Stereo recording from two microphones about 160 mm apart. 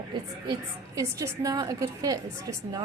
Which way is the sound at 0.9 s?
20° right (ahead or behind).